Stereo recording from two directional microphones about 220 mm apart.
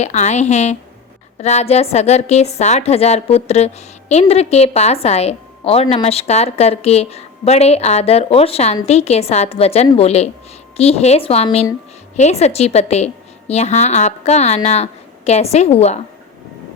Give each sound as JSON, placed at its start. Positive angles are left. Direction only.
{"t": 0.0, "sound": "a woman's voice", "side_deg": 30}